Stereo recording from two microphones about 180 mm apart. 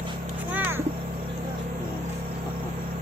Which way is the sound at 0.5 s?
10° right (ahead or behind).